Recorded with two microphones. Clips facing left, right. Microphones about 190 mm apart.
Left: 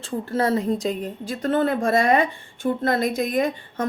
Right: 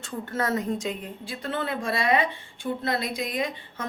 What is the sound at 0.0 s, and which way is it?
A woman's voice, 30° left (ahead or behind).